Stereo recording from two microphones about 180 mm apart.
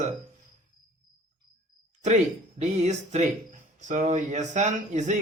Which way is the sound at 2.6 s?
40° right (ahead or behind).